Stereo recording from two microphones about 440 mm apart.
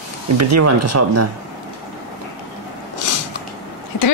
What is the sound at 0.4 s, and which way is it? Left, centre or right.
Speech, right.